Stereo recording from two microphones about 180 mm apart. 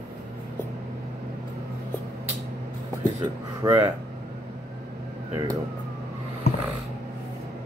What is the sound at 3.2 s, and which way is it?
Speech, 15° right (ahead or behind).